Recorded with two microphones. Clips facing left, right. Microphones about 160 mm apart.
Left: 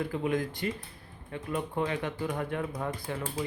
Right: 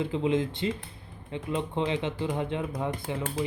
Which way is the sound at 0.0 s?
20° right (ahead or behind).